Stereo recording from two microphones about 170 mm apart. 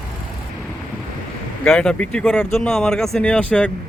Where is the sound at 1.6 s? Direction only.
5° left (ahead or behind).